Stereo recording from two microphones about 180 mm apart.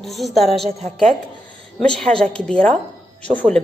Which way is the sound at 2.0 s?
5° left (ahead or behind).